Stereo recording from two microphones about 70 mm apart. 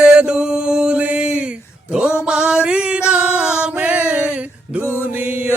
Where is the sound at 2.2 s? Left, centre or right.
Centre.